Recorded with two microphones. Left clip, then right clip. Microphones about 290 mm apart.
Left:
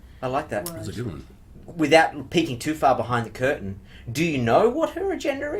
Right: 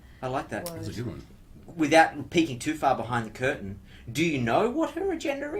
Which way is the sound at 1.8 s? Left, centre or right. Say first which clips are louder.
Left 3 dB; left.